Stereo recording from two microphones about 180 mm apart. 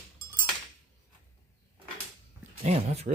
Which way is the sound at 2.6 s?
35° right (ahead or behind).